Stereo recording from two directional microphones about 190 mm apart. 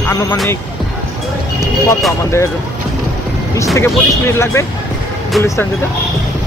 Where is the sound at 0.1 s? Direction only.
15° left (ahead or behind).